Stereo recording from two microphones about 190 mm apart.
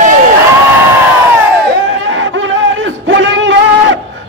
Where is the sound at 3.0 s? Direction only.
80° right.